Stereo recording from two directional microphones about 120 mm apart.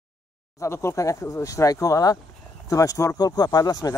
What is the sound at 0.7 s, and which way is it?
Speech, 25° left (ahead or behind).